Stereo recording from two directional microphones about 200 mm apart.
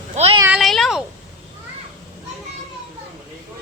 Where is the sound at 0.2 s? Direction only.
30° right (ahead or behind).